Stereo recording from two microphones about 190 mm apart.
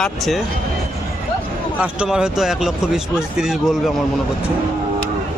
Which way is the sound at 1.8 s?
5° right (ahead or behind).